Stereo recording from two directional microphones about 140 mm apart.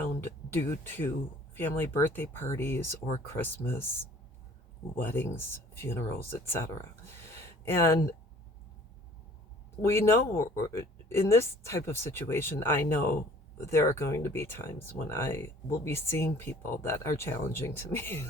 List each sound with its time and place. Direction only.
0.0 s speech: 15° left (ahead or behind)
4.9 s speech: 15° left (ahead or behind)
7.2 s a sound: 20° left (ahead or behind)
9.8 s speech: 20° left (ahead or behind)